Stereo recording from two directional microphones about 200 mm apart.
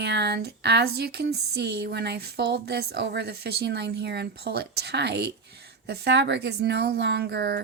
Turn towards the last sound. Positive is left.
turn(degrees=-55)  # may be behind; listen again after turning